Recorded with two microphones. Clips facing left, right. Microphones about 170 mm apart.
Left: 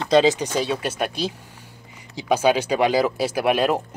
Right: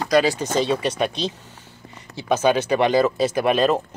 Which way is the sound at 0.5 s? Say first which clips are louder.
Right 3 dB; 5° left (ahead or behind).